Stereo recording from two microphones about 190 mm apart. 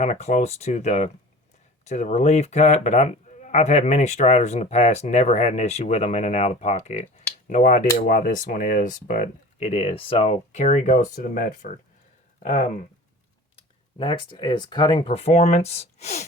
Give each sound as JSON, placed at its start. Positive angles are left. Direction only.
{"t": 0.0, "sound": "speech", "side_deg": 35}
{"t": 14.0, "sound": "speech", "side_deg": 25}